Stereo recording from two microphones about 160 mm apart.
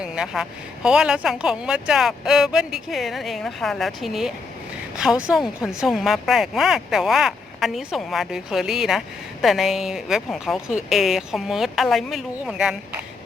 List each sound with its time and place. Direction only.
0.0 s speech: 5° right (ahead or behind)